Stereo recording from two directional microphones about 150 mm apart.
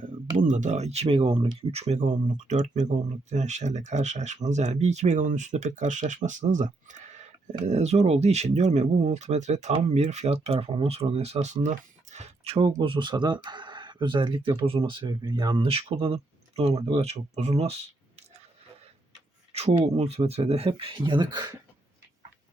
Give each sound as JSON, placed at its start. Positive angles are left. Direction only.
{"t": 0.3, "sound": "speech", "side_deg": -55}
{"t": 19.5, "sound": "speech", "side_deg": -45}